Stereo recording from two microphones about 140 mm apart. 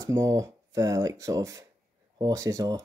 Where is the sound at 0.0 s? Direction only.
20° right (ahead or behind).